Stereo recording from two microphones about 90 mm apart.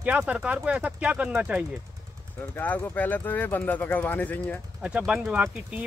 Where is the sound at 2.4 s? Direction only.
20° left (ahead or behind).